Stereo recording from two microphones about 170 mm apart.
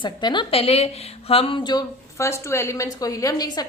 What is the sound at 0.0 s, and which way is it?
A woman's voice, 25° left (ahead or behind).